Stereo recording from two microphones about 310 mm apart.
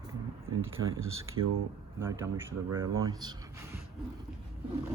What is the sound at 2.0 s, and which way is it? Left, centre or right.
Speech, centre.